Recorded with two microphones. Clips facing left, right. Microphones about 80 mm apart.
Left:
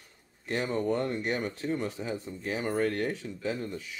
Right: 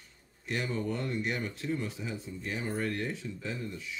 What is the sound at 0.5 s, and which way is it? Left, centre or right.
Speech, left.